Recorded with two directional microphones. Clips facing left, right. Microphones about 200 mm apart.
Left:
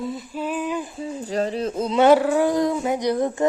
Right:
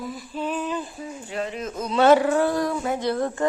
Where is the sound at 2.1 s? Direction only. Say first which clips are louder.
Left 2 dB; 5° left (ahead or behind).